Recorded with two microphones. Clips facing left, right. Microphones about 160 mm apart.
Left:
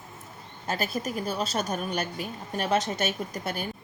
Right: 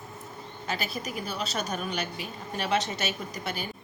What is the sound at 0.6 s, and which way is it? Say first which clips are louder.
A woman's voice: left 4 dB; 45° left (ahead or behind).